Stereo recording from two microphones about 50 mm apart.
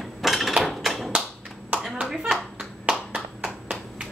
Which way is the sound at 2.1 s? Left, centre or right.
Centre.